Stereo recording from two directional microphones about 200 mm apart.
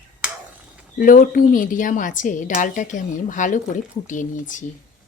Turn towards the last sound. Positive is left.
turn(degrees=40)  # may be behind; listen again after turning